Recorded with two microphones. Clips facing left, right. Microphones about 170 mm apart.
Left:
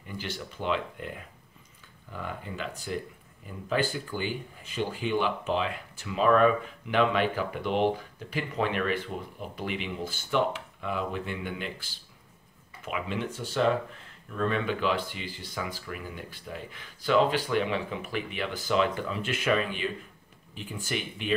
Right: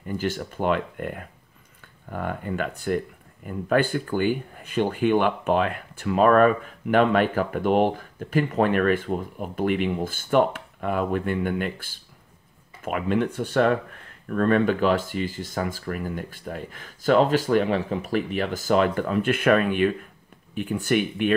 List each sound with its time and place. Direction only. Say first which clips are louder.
0.0 s speech: right 10 dB; 45° right (ahead or behind)